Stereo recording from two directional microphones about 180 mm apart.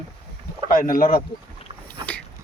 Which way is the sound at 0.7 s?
50° left (ahead or behind).